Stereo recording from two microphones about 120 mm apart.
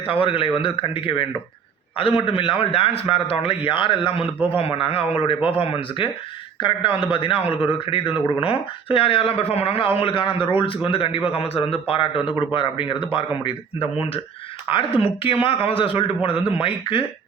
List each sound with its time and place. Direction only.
0.1 s speech: 50° left (ahead or behind)